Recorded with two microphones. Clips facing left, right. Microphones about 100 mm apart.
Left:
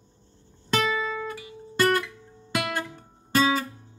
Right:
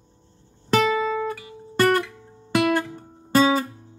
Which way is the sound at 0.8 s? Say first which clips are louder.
Right 5 dB; 40° right (ahead or behind).